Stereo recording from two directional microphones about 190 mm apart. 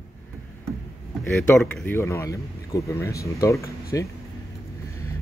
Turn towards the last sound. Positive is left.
turn(degrees=15)  # may be behind; listen again after turning